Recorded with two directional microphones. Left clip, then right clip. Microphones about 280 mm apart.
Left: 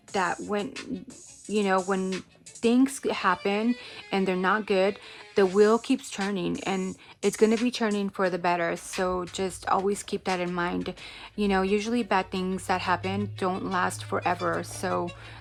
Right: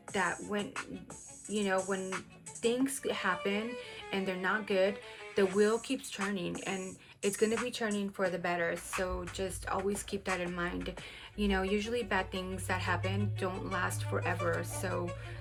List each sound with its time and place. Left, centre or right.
0.1 s a woman's voice: centre